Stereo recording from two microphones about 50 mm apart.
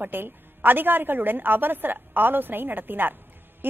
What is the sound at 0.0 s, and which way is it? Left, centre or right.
A woman's voice, right.